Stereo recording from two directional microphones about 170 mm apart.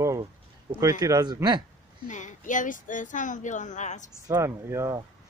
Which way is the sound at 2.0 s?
45° left (ahead or behind).